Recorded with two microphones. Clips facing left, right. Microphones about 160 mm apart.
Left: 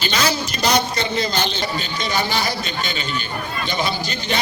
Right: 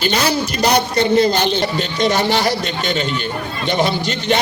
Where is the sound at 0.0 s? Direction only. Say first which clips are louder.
Right 4 dB; 55° right (ahead or behind).